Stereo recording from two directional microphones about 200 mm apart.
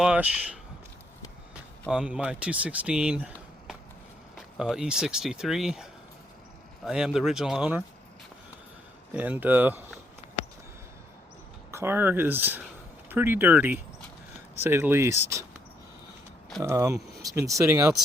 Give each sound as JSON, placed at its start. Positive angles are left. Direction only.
{"t": 0.0, "sound": "speech", "side_deg": -5}
{"t": 1.9, "sound": "speech", "side_deg": -5}
{"t": 9.1, "sound": "speech", "side_deg": -10}
{"t": 11.7, "sound": "speech", "side_deg": -10}
{"t": 16.6, "sound": "speech", "side_deg": -15}